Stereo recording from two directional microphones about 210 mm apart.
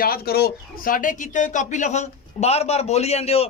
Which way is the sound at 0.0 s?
45° left (ahead or behind).